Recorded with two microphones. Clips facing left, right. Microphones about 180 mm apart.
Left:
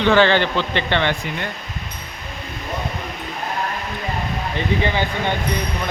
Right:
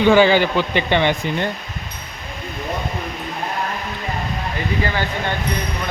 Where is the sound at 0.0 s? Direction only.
10° right (ahead or behind).